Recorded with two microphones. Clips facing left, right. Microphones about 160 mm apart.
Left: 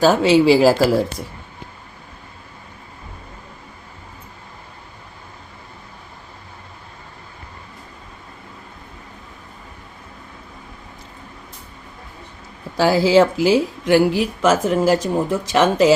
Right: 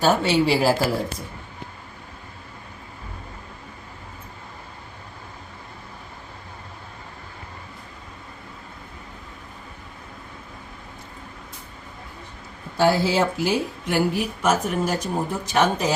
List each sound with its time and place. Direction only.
0.0 s speech: 90° left
12.7 s speech: 90° left